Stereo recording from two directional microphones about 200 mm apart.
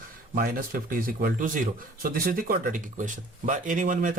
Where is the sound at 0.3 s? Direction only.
45° right (ahead or behind).